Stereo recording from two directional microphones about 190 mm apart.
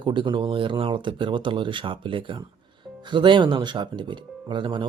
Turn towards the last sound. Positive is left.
turn(degrees=-25)  # may be behind; listen again after turning